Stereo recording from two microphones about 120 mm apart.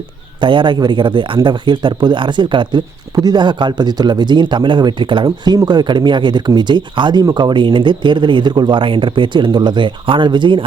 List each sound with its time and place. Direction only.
0.3 s speech: 40° right (ahead or behind)